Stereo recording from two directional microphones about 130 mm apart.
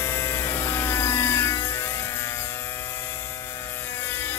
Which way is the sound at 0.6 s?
20° left (ahead or behind).